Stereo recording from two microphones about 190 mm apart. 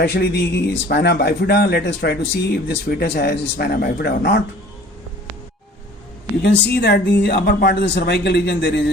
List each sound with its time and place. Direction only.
0.0 s a man's voice: 60° left (ahead or behind)
6.4 s a man's voice: 60° left (ahead or behind)